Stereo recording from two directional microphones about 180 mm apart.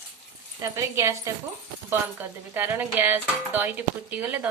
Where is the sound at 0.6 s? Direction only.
15° right (ahead or behind).